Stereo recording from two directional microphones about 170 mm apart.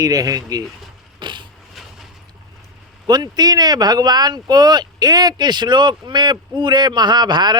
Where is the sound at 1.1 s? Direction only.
25° right (ahead or behind).